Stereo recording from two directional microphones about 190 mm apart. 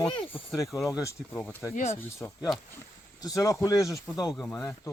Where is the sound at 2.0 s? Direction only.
10° left (ahead or behind).